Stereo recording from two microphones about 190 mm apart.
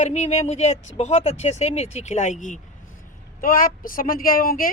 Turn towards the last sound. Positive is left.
turn(degrees=50)  # may be behind; listen again after turning